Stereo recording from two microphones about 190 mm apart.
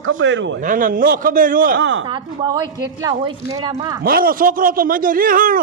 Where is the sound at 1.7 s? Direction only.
70° right (ahead or behind).